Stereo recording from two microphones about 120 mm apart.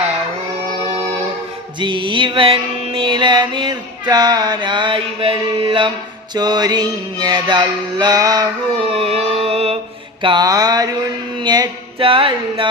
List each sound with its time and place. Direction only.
1.8 s music: 45° right (ahead or behind)
6.3 s music: 35° right (ahead or behind)
8.9 s music: 55° right (ahead or behind)
10.2 s music: 40° right (ahead or behind)
11.9 s music: 45° right (ahead or behind)